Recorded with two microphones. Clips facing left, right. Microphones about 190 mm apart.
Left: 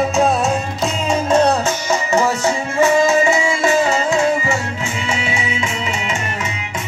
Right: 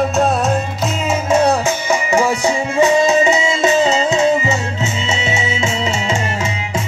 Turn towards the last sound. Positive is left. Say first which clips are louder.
# right 4 dB
turn(degrees=-30)  # may be behind; listen again after turning